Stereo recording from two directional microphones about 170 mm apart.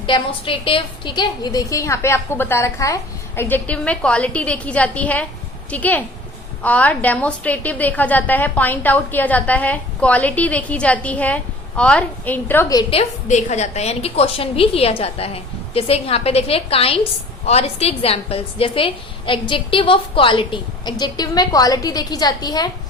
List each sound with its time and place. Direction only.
0.0 s a woman's voice: 30° left (ahead or behind)
12.9 s a woman's voice: 40° left (ahead or behind); by 22.7 s 25° left (ahead or behind)